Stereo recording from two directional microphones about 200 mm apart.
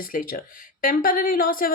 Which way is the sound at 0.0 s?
45° left (ahead or behind).